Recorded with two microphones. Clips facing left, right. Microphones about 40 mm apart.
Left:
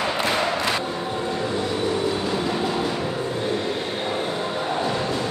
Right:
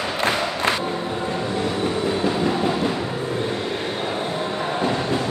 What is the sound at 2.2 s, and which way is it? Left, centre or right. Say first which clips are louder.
Train: right 3 dB; right.